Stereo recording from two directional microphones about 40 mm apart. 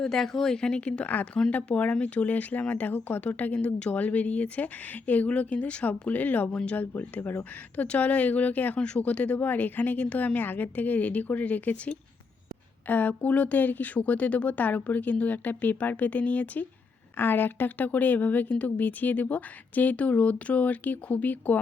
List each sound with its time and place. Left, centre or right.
0.0 s a woman's voice: centre
1.0 s speech: left
2.2 s speech: left
3.2 s speech: left
7.9 s speech: left
12.9 s speech: left
17.2 s speech: left